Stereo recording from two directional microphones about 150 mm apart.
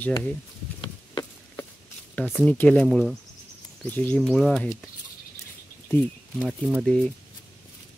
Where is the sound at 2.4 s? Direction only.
10° left (ahead or behind).